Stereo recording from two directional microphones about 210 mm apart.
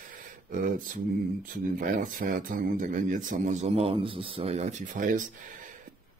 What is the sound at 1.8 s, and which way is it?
A man's voice, 40° right (ahead or behind).